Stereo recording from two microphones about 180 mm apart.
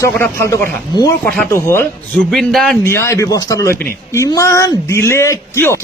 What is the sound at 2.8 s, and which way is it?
Speech, 15° left (ahead or behind).